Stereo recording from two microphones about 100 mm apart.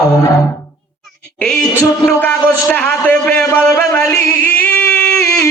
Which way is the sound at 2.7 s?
15° left (ahead or behind).